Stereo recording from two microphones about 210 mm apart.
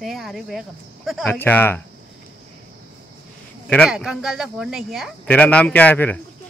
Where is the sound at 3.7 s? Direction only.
Centre (ahead or behind).